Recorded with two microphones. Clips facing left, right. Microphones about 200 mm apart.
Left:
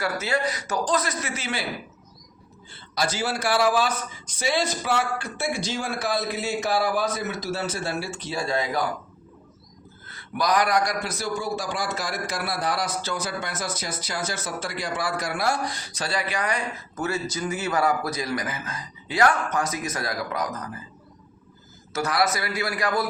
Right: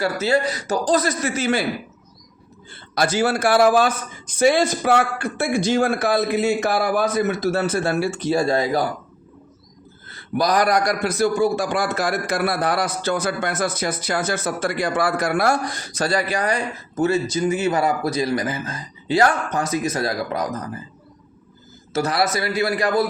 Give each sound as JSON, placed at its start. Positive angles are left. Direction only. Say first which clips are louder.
{"t": 0.0, "sound": "a man's voice", "louder": "right 6 dB", "side_deg": -30}
{"t": 2.9, "sound": "a man's voice", "louder": "right 7 dB", "side_deg": -55}
{"t": 10.3, "sound": "a man's voice", "louder": "right 4 dB", "side_deg": -35}
{"t": 17.3, "sound": "speech", "louder": "right 6 dB", "side_deg": -25}
{"t": 21.9, "sound": "speech", "louder": "right 3 dB", "side_deg": -30}